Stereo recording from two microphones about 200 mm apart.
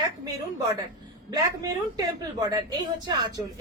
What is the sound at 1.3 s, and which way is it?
A woman's voice, 15° right (ahead or behind).